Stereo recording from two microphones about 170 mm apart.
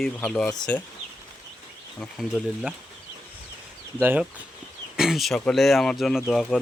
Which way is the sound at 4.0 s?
10° right (ahead or behind).